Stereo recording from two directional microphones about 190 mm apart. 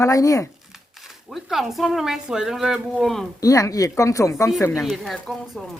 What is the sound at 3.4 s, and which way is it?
Speech, 15° left (ahead or behind).